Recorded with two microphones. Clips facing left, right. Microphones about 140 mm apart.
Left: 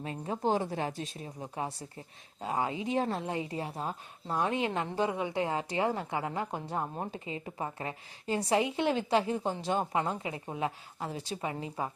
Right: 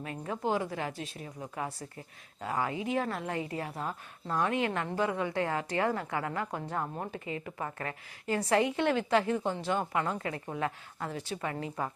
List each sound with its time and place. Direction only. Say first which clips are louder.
0.0 s speech: left 2 dB; 25° left (ahead or behind)